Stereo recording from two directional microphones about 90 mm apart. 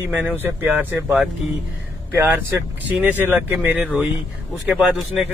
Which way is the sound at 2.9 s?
20° right (ahead or behind).